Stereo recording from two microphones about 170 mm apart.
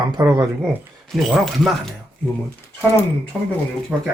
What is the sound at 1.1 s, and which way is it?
Speech, centre (ahead or behind).